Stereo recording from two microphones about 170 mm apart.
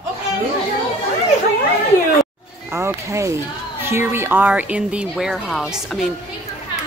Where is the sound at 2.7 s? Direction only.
15° right (ahead or behind).